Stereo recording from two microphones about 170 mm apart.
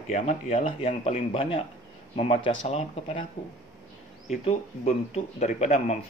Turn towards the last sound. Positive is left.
turn(degrees=40)  # may be behind; listen again after turning